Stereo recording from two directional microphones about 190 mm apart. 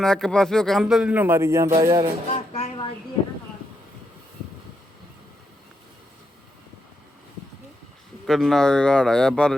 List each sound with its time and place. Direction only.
0.0 s a man's voice: 5° left (ahead or behind); by 2.1 s 20° right (ahead or behind)
2.3 s a sound: 30° left (ahead or behind)
8.3 s a man's voice: centre (ahead or behind)